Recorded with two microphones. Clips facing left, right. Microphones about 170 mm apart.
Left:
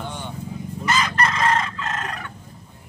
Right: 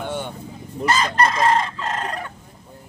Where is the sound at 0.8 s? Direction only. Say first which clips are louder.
Right 3 dB; 30° right (ahead or behind).